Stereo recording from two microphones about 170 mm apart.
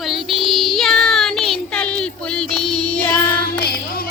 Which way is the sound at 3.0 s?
10° left (ahead or behind).